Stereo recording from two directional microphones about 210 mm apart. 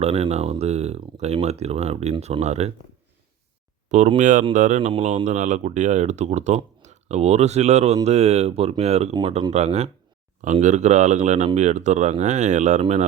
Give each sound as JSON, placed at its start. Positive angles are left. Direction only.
{"t": 0.0, "sound": "speech", "side_deg": -30}
{"t": 3.8, "sound": "speech", "side_deg": -35}